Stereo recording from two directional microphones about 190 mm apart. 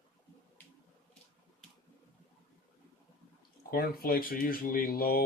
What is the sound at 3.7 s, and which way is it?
Speech, 50° left (ahead or behind).